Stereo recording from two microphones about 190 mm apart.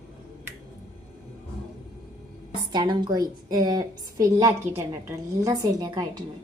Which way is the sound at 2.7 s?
25° right (ahead or behind).